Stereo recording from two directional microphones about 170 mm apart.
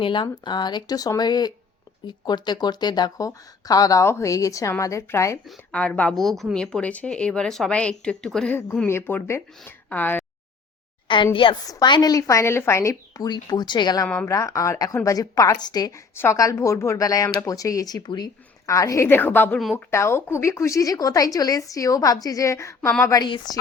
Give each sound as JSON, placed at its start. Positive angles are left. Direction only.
{"t": 0.0, "sound": "a woman's voice", "side_deg": 30}
{"t": 5.5, "sound": "speech", "side_deg": 5}
{"t": 11.1, "sound": "a woman's voice", "side_deg": 30}